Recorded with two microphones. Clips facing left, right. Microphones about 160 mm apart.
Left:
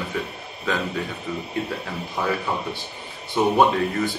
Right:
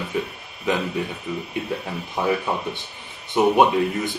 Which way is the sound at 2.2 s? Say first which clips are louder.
Right 3 dB; 15° right (ahead or behind).